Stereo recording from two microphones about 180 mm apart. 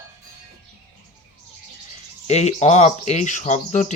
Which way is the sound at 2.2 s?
35° left (ahead or behind).